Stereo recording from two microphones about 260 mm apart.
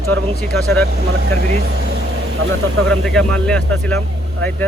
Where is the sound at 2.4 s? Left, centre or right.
Right.